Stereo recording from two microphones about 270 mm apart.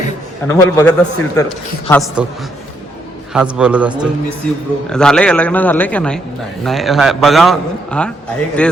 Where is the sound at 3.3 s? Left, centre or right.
Centre.